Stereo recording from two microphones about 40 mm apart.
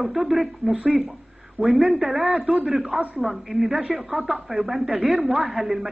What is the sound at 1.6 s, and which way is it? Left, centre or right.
Speech, right.